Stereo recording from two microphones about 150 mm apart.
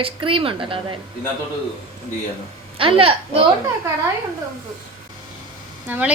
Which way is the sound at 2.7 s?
35° right (ahead or behind).